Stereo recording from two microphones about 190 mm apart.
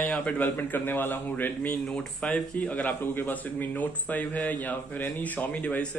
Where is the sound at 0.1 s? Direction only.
10° left (ahead or behind).